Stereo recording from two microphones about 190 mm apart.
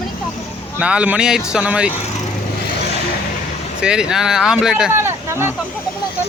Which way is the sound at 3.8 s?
5° right (ahead or behind).